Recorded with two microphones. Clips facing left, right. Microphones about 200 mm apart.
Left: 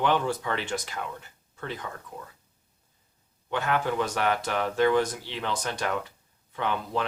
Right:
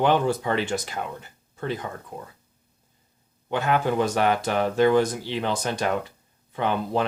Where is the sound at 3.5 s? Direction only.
20° right (ahead or behind).